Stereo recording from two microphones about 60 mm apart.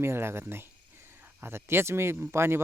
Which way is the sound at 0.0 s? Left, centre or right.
Right.